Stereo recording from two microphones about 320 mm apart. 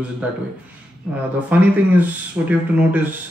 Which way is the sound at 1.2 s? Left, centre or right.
Centre.